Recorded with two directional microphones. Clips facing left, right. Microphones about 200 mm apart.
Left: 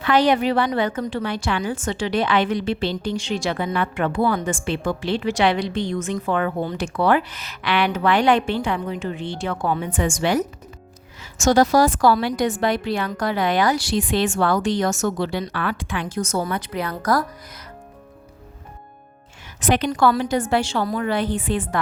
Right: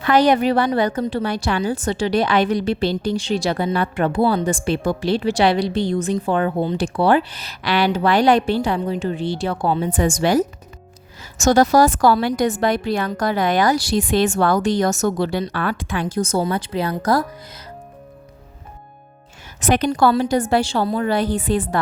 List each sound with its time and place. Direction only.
0.0 s a woman's voice: 40° right (ahead or behind); by 17.2 s 25° right (ahead or behind)
19.6 s a woman's voice: 45° right (ahead or behind)